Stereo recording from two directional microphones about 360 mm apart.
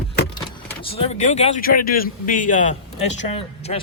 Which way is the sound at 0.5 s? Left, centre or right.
Centre.